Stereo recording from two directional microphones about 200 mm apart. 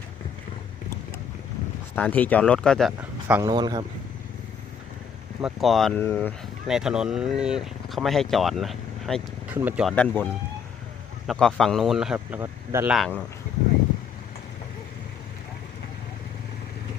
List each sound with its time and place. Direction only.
2.0 s speech: 10° left (ahead or behind); by 3.4 s 5° right (ahead or behind)
3.4 s speech: 20° right (ahead or behind)
5.4 s speech: centre (ahead or behind)
9.9 s speech: 5° left (ahead or behind)
11.3 s speech: centre (ahead or behind)
13.0 s speech: 10° left (ahead or behind)